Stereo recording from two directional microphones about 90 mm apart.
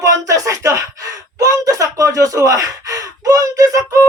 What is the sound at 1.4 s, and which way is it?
Gasp, 40° right (ahead or behind).